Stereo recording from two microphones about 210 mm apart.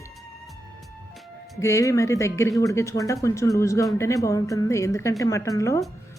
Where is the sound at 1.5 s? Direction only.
15° left (ahead or behind).